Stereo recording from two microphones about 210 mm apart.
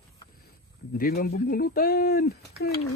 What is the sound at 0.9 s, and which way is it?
Speech, 45° left (ahead or behind).